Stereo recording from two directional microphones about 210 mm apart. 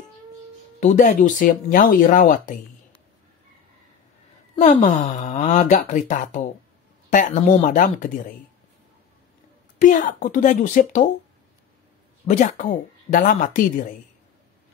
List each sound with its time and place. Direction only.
0.7 s speech: 35° left (ahead or behind)
4.6 s speech: 35° left (ahead or behind)
9.8 s speech: 40° left (ahead or behind)
12.3 s speech: 35° left (ahead or behind)